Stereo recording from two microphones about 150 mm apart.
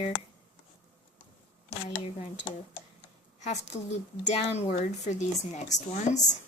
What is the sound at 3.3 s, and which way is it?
A woman's voice, 50° left (ahead or behind).